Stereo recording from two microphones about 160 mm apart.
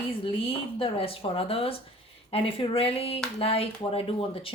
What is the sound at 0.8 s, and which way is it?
Speech, 35° left (ahead or behind).